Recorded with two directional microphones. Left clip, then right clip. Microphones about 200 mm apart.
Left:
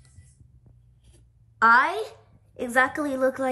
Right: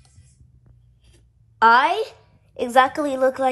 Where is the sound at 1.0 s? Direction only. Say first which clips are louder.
Right 4 dB; 5° right (ahead or behind).